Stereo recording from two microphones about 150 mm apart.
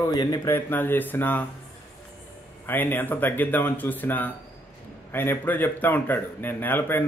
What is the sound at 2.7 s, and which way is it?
A man's voice, 15° left (ahead or behind).